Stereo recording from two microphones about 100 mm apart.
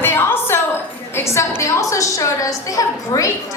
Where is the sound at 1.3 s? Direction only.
30° left (ahead or behind).